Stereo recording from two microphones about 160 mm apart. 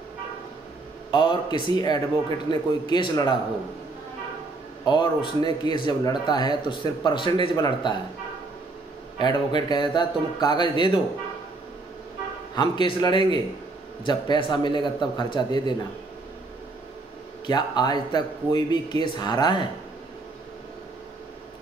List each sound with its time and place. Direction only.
1.1 s a man's voice: 30° left (ahead or behind)
4.8 s a man's voice: 30° left (ahead or behind)
9.2 s a man's voice: 25° left (ahead or behind)
12.5 s a man's voice: 30° left (ahead or behind)
17.5 s a man's voice: 25° left (ahead or behind)